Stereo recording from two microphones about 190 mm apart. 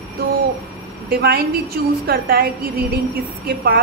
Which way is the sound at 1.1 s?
55° right (ahead or behind).